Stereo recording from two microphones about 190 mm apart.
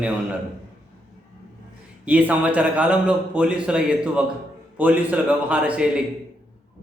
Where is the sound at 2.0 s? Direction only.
5° right (ahead or behind).